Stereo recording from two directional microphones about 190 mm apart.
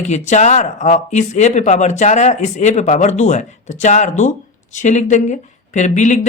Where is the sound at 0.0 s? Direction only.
40° left (ahead or behind).